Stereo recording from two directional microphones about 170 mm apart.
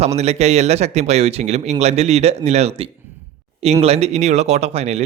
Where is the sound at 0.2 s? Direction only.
40° right (ahead or behind).